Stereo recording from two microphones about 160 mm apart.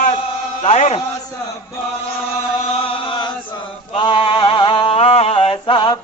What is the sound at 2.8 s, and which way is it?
Chant, 35° left (ahead or behind).